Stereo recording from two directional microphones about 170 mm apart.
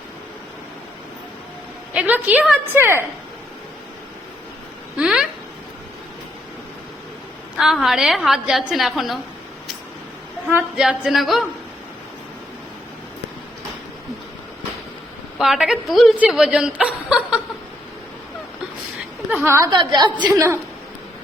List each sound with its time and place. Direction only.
1.9 s a woman's voice: 10° right (ahead or behind)
4.9 s speech: 5° right (ahead or behind)
7.5 s a woman's voice: 5° right (ahead or behind)
10.5 s a woman's voice: 5° right (ahead or behind)
15.4 s a woman's voice: centre (ahead or behind)
19.3 s a woman's voice: 10° right (ahead or behind)
19.7 s a woman's voice: 25° right (ahead or behind)